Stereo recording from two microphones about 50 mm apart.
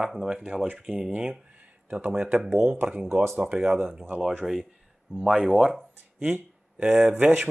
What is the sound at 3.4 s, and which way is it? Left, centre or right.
Speech, centre.